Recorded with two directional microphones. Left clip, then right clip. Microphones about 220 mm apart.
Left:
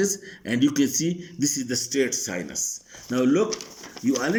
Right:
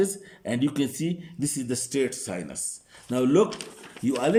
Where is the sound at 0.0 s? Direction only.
20° right (ahead or behind).